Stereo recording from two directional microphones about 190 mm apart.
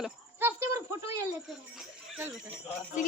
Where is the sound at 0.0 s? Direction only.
10° right (ahead or behind).